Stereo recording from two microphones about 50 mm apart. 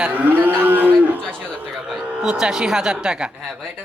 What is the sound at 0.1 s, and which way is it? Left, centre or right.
Cattle, right.